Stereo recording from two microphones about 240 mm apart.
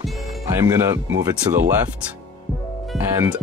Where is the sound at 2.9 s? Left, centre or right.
Centre.